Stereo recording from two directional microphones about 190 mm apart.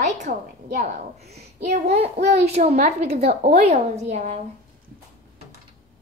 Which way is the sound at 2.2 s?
60° right (ahead or behind).